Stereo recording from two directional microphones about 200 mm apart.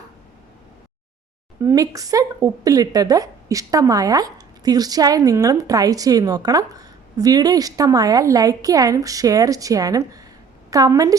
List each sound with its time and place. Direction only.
1.6 s a woman's voice: 15° right (ahead or behind)